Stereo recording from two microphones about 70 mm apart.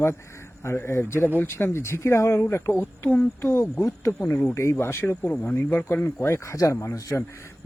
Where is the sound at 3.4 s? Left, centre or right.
Left.